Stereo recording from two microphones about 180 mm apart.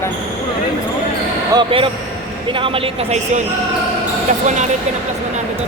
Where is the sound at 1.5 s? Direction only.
30° right (ahead or behind).